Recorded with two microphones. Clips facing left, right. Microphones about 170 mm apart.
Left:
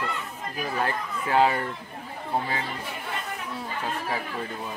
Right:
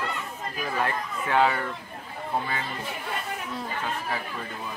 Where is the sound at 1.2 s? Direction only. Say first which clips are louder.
Left 1 dB; 30° left (ahead or behind).